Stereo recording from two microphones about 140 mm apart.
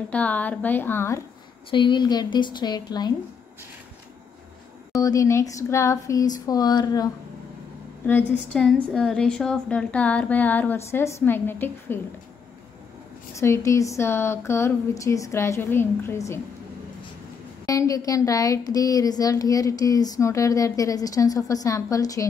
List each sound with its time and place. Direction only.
0.1 s a woman's voice: 10° left (ahead or behind)
1.7 s a woman's voice: 35° left (ahead or behind)
4.9 s speech: 25° left (ahead or behind)
8.1 s a woman's voice: 5° left (ahead or behind)
13.4 s speech: 20° left (ahead or behind)
17.6 s speech: 25° left (ahead or behind)